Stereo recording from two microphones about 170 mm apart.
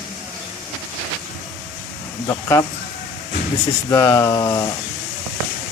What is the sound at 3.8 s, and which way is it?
Speech, 15° left (ahead or behind).